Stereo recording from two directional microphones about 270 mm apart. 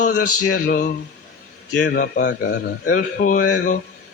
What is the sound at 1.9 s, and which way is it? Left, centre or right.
A man's voice, left.